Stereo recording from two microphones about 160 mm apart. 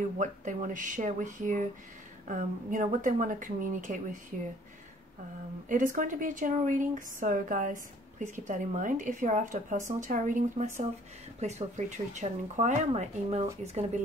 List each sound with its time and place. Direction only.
0.2 s a woman's voice: 50° right (ahead or behind)
5.7 s a woman's voice: 55° right (ahead or behind)